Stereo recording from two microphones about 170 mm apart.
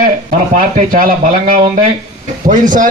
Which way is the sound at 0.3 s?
50° right (ahead or behind).